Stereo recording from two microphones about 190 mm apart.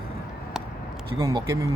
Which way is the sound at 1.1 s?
15° right (ahead or behind).